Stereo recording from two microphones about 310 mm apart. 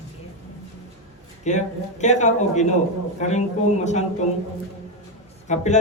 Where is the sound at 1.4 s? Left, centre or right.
Left.